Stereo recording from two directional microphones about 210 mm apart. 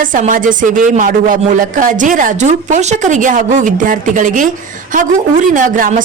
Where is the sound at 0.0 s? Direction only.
40° right (ahead or behind).